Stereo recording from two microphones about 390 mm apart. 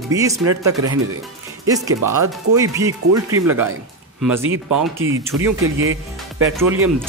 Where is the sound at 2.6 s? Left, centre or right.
Centre.